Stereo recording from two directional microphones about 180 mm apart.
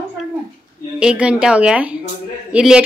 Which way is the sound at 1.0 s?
5° right (ahead or behind).